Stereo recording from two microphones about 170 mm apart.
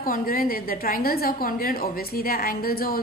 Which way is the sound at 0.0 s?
55° left (ahead or behind).